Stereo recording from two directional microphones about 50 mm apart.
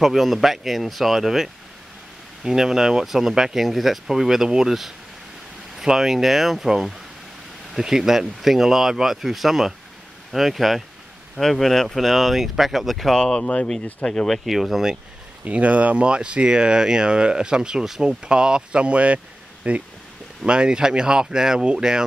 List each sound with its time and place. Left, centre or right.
0.0 s speech: centre
13.1 s speech: centre
14.4 s speech: centre
15.4 s speech: right